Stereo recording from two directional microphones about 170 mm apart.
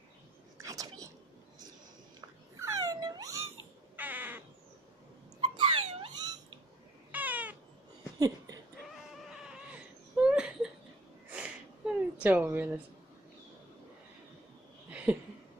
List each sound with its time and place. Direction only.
0.6 s whispering: 20° right (ahead or behind)
2.6 s cat: 20° right (ahead or behind)
3.9 s crow: 10° right (ahead or behind)
5.4 s dog: 30° right (ahead or behind)
7.1 s cat: 10° right (ahead or behind)
10.2 s laughter: 5° right (ahead or behind)
11.3 s a sound: 5° right (ahead or behind)
14.9 s a sound: 10° right (ahead or behind)